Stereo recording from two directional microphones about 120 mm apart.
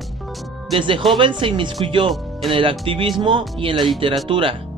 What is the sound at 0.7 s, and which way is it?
Speech, 45° right (ahead or behind).